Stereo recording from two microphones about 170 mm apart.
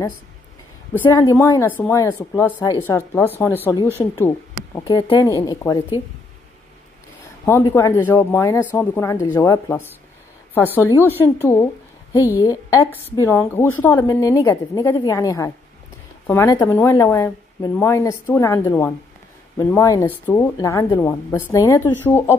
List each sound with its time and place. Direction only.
1.1 s a woman's voice: 20° left (ahead or behind)
7.4 s a woman's voice: 15° left (ahead or behind)